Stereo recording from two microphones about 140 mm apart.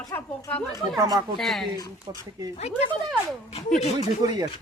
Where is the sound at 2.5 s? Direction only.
50° left (ahead or behind).